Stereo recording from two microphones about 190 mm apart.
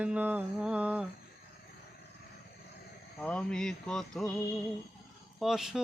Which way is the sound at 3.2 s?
5° left (ahead or behind).